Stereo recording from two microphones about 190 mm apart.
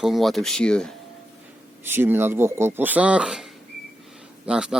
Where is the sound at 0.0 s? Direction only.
Centre (ahead or behind).